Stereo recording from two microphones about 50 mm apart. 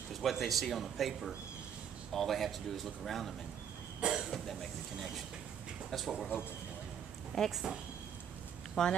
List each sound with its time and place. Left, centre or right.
0.1 s speech: centre
4.0 s cough: centre
5.9 s speech: centre
7.3 s speech: centre
8.8 s speech: centre